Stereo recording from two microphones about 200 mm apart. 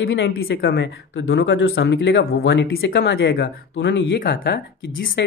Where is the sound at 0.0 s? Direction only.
60° left (ahead or behind).